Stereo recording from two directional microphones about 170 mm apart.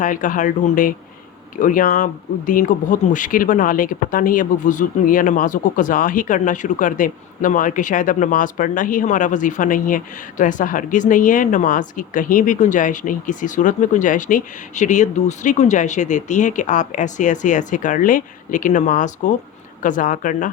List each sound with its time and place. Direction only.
0.0 s speech: 50° left (ahead or behind)